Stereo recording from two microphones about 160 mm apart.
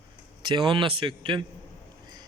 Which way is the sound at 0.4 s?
30° right (ahead or behind).